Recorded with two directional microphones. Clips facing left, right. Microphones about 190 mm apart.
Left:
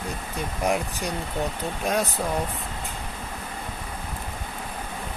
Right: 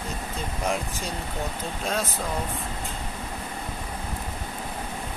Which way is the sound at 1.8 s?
15° left (ahead or behind).